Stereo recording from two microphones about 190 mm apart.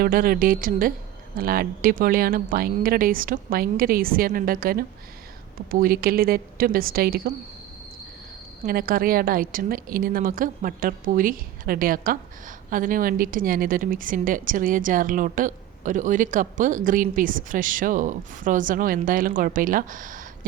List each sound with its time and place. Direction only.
0.0 s a woman's voice: 50° right (ahead or behind)
8.6 s a woman's voice: 50° right (ahead or behind)